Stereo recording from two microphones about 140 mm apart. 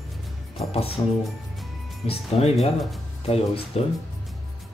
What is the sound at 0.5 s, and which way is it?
Music, 45° left (ahead or behind).